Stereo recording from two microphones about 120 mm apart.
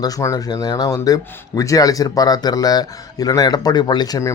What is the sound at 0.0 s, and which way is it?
Speech, 30° left (ahead or behind).